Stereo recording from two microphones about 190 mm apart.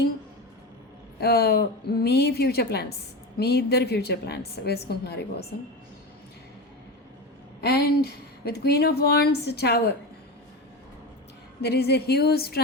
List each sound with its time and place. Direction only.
1.2 s speech: 55° left (ahead or behind)
7.6 s speech: 60° left (ahead or behind)
11.6 s speech: 60° left (ahead or behind)